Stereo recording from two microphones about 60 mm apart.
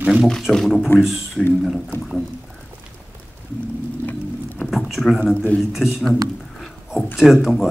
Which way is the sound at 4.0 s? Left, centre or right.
Left.